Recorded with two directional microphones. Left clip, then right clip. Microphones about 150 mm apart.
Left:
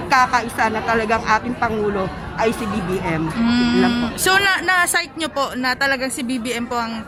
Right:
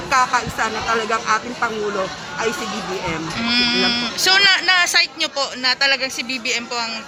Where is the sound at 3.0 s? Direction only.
30° left (ahead or behind).